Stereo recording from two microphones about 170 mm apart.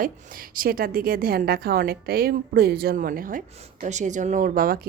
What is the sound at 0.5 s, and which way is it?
A woman's voice, 60° right (ahead or behind).